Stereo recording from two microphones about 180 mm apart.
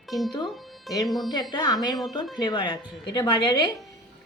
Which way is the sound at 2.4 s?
25° left (ahead or behind).